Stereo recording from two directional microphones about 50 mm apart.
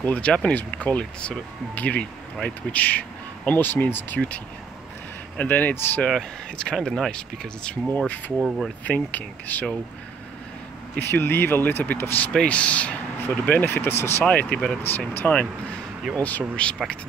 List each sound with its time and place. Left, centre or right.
0.0 s speech: left
0.3 s speech: centre; by 4.2 s left
5.4 s speech: left
6.0 s speech: centre
8.8 s speech: left
11.0 s speech: left
12.3 s speech: left
13.2 s speech: left
14.2 s speech: left
14.8 s speech: left